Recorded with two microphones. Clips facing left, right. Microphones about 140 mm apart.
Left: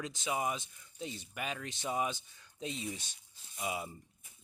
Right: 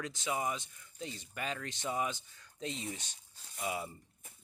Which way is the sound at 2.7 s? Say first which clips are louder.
Left 1 dB; 25° right (ahead or behind).